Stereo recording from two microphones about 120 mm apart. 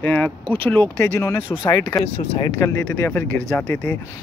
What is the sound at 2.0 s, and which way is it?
Speech, 65° left (ahead or behind).